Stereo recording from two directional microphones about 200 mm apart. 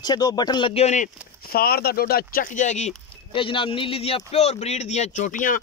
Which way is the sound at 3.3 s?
25° left (ahead or behind).